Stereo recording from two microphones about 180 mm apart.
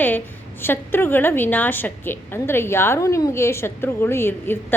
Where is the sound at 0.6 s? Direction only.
10° left (ahead or behind).